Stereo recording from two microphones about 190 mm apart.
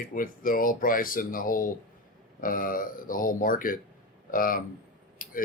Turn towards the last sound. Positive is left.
turn(degrees=45)  # may be behind; listen again after turning